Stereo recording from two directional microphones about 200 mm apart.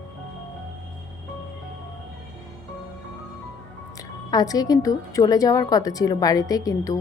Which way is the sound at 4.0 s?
20° left (ahead or behind).